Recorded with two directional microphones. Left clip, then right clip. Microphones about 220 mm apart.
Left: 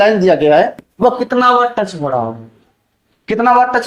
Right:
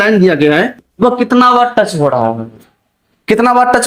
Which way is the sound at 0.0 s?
40° right (ahead or behind).